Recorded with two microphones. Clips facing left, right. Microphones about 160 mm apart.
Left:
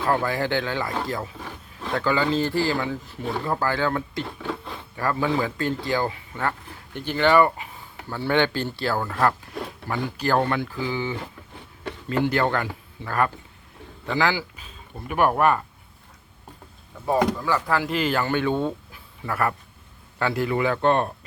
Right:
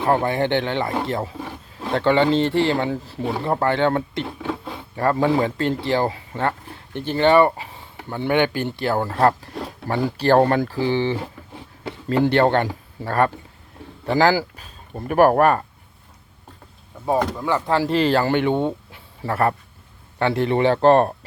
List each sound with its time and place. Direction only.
0.0 s speech: 25° right (ahead or behind)
9.0 s speech: 30° right (ahead or behind); by 15.6 s 45° right (ahead or behind)
17.4 s speech: 25° right (ahead or behind)